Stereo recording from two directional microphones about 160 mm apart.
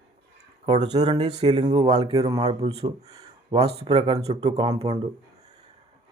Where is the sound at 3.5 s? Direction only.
40° right (ahead or behind).